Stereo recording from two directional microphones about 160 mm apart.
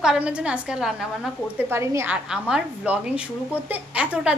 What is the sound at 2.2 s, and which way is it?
A woman's voice, 5° right (ahead or behind).